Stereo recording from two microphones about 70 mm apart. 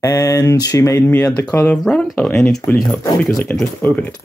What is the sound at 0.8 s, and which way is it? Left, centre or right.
Speech, left.